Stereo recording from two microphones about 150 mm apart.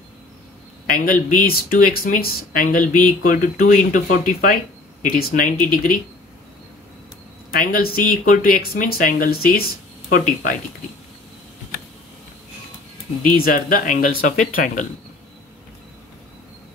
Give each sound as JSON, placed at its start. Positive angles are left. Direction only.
{"t": 0.8, "sound": "speech", "side_deg": 70}
{"t": 7.5, "sound": "speech", "side_deg": 75}
{"t": 13.2, "sound": "speech", "side_deg": 70}